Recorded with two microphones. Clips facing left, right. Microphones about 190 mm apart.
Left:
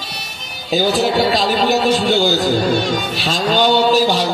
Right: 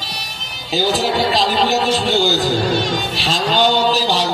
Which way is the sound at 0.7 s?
50° left (ahead or behind).